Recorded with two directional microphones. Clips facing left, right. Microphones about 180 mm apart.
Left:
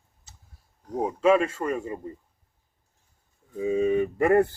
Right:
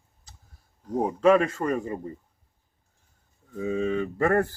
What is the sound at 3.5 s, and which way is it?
Mantra, 10° left (ahead or behind).